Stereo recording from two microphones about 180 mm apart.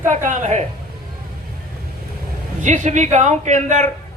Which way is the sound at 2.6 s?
40° right (ahead or behind).